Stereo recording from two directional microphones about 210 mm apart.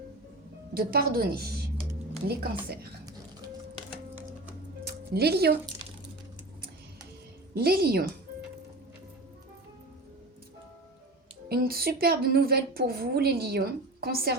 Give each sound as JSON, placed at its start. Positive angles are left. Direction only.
{"t": 0.7, "sound": "a woman's voice", "side_deg": -45}
{"t": 4.9, "sound": "speech", "side_deg": -50}
{"t": 7.5, "sound": "a woman's voice", "side_deg": -45}
{"t": 11.4, "sound": "a woman's voice", "side_deg": -45}